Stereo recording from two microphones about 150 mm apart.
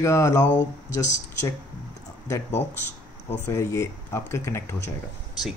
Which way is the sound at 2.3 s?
20° left (ahead or behind).